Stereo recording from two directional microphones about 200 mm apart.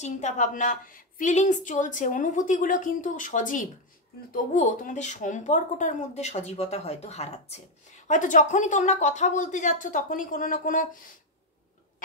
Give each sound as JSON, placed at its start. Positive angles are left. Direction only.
{"t": 0.0, "sound": "a woman's voice", "side_deg": 35}